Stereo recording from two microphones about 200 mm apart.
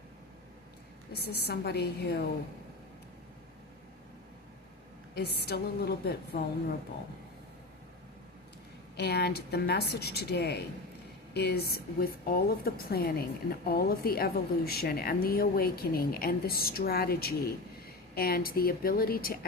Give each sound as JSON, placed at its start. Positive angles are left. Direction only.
{"t": 1.1, "sound": "speech", "side_deg": 55}
{"t": 5.4, "sound": "speech", "side_deg": 55}
{"t": 9.0, "sound": "a woman's voice", "side_deg": 55}